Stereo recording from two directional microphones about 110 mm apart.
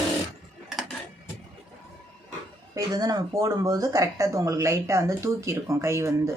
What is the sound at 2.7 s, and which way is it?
Speech, 35° right (ahead or behind).